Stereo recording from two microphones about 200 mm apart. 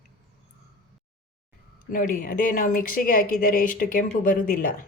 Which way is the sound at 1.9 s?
40° left (ahead or behind).